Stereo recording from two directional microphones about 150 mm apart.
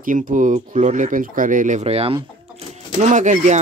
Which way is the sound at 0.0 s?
60° right (ahead or behind).